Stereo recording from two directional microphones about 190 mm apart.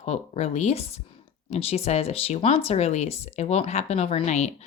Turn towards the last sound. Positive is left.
turn(degrees=35)  # may be behind; listen again after turning